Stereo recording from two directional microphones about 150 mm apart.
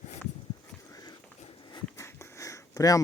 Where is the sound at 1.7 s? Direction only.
20° left (ahead or behind).